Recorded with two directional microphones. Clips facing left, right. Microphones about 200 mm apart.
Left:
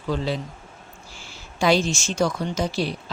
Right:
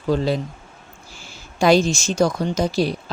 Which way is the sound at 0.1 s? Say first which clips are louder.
Right 4 dB; 40° right (ahead or behind).